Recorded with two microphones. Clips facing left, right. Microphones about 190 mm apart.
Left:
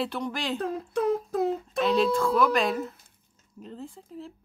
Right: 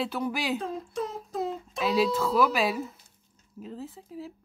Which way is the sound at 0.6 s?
60° left (ahead or behind).